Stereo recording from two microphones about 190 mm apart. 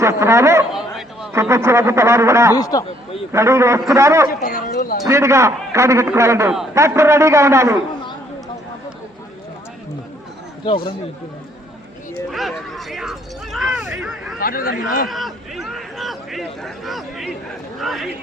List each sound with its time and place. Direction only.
0.0 s a man's voice: 15° right (ahead or behind)
0.7 s a sound: centre (ahead or behind)
1.3 s a man's voice: 15° right (ahead or behind)
2.6 s speech: 20° left (ahead or behind)
3.3 s a man's voice: 15° right (ahead or behind)
4.4 s speech: 45° left (ahead or behind)
5.0 s a man's voice: 15° right (ahead or behind)
12.3 s a sound: centre (ahead or behind)
14.3 s speech: 50° left (ahead or behind)
15.1 s speech: centre (ahead or behind)